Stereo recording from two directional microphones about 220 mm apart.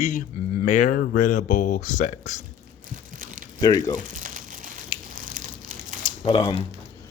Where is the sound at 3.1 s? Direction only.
40° right (ahead or behind).